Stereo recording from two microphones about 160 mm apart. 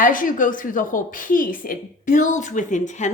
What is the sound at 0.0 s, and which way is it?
A woman's voice, 55° left (ahead or behind).